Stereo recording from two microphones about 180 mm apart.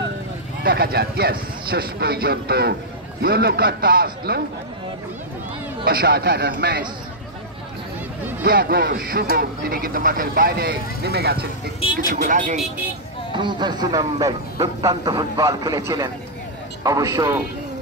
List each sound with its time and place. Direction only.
0.7 s speech: 60° right (ahead or behind)
5.9 s speech: 60° right (ahead or behind)
8.5 s speech: 55° right (ahead or behind)
12.1 s speech: 50° right (ahead or behind)
13.3 s speech: 25° right (ahead or behind)
16.8 s speech: 20° right (ahead or behind)